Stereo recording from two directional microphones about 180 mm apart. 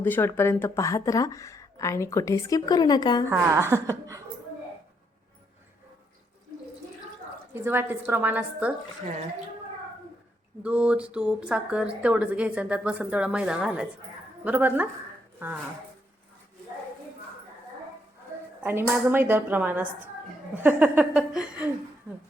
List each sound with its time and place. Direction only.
0.0 s speech: 10° left (ahead or behind)
3.2 s a woman's voice: 15° right (ahead or behind)
7.5 s a woman's voice: 10° right (ahead or behind)
10.6 s a woman's voice: 5° right (ahead or behind)
18.6 s a woman's voice: 15° right (ahead or behind)